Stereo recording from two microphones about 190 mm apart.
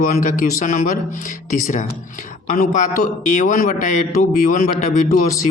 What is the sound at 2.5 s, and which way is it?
Speech, 45° left (ahead or behind).